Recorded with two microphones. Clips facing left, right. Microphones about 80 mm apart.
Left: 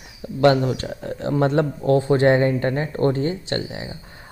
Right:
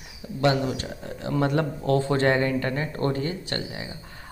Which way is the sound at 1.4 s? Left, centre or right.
Left.